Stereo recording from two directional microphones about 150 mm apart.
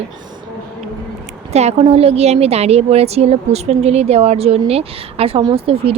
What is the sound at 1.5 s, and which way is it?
A woman's voice, 45° right (ahead or behind).